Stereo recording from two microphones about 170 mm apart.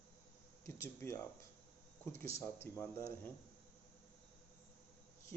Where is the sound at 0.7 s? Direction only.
15° left (ahead or behind).